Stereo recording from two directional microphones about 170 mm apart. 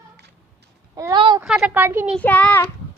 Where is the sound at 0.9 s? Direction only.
25° right (ahead or behind).